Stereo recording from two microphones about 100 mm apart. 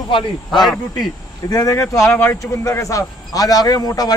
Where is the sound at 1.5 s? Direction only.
35° left (ahead or behind).